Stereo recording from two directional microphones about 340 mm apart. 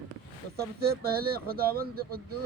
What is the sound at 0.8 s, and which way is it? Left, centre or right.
Speech, right.